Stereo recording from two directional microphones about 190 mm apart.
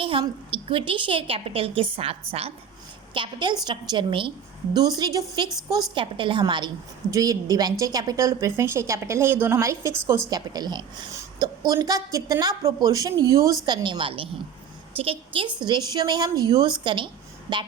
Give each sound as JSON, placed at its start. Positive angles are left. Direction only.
{"t": 0.0, "sound": "a woman's voice", "side_deg": -30}